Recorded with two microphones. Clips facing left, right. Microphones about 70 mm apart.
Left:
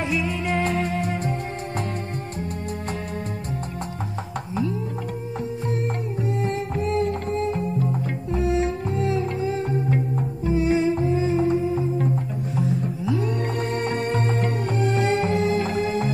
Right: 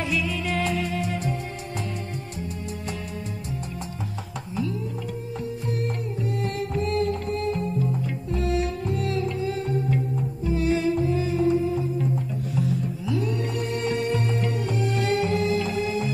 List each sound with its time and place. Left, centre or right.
0.0 s music: left
5.4 s music: left
10.5 s music: left
13.4 s music: left